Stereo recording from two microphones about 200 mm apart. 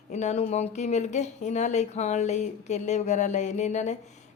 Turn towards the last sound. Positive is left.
turn(degrees=35)  # may be behind; listen again after turning